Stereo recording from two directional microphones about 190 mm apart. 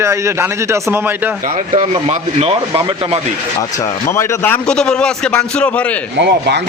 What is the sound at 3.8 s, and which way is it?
A man's voice, 15° left (ahead or behind).